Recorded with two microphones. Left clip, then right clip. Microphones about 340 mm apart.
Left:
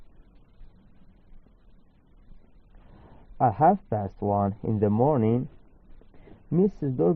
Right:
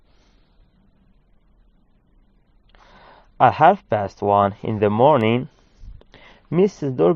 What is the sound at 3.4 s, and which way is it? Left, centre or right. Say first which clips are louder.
Speech: right 7 dB; right.